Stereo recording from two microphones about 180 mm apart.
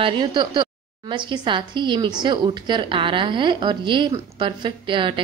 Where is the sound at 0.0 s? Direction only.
25° right (ahead or behind).